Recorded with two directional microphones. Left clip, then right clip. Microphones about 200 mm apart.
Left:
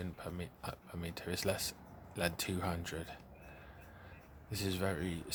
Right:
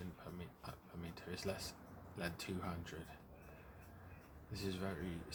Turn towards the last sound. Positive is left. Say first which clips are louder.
# left 8 dB
turn(degrees=50)  # may be behind; listen again after turning